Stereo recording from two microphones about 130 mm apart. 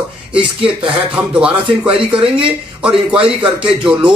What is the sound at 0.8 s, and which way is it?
Speech, 10° right (ahead or behind).